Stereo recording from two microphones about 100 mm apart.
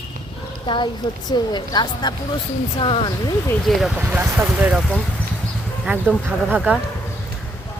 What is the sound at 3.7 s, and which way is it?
Speech, centre (ahead or behind).